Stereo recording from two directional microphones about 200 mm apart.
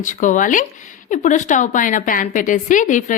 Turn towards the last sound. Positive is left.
turn(degrees=40)  # may be behind; listen again after turning